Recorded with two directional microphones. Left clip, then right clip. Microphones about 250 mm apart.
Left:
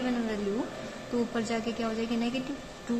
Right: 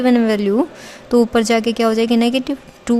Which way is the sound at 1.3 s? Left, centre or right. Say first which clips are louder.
Right 16 dB; right.